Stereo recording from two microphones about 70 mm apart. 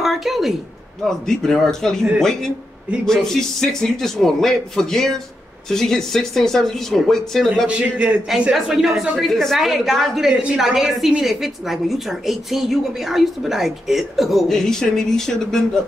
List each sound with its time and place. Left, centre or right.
0.0 s a woman's voice: centre
7.6 s a man's voice: centre
8.5 s a woman's voice: centre
9.2 s a woman's voice: centre